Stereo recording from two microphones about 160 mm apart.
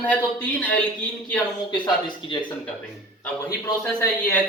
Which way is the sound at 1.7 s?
30° left (ahead or behind).